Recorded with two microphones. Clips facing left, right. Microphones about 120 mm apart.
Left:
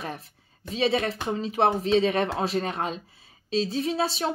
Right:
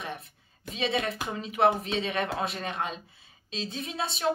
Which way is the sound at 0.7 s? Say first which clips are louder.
Left 5 dB; 35° left (ahead or behind).